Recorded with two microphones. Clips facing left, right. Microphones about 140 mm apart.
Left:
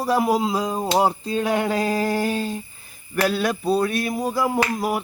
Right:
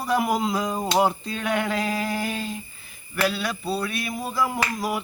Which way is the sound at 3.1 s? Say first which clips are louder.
Left 4 dB; 45° left (ahead or behind).